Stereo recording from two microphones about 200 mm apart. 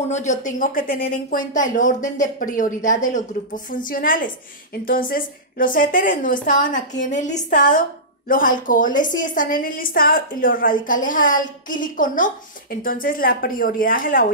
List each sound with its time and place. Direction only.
0.1 s a woman's voice: 35° left (ahead or behind)